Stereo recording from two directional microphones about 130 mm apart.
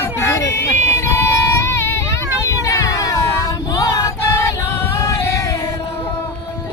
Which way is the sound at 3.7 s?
25° left (ahead or behind).